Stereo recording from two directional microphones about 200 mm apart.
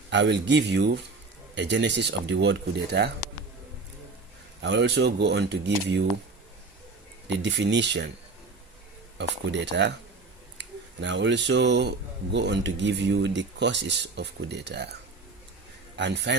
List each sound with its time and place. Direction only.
0.1 s speech: 60° right (ahead or behind)
4.6 s speech: 60° right (ahead or behind)
7.3 s speech: 60° right (ahead or behind)
9.1 s speech: 60° right (ahead or behind)
16.0 s speech: 60° right (ahead or behind)